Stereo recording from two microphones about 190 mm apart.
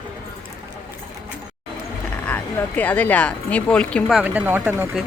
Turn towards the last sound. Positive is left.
turn(degrees=-10)  # may be behind; listen again after turning